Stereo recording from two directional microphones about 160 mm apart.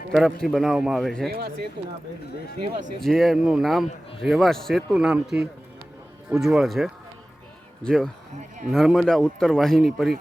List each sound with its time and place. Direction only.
0.1 s a man's voice: centre (ahead or behind)
3.0 s a man's voice: centre (ahead or behind)
8.4 s speech: 50° right (ahead or behind)
8.7 s a man's voice: centre (ahead or behind)